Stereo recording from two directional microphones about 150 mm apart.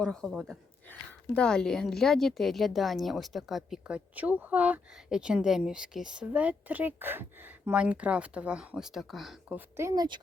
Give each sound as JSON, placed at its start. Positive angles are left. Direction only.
{"t": 0.0, "sound": "a woman's voice", "side_deg": 5}
{"t": 9.6, "sound": "speech", "side_deg": -20}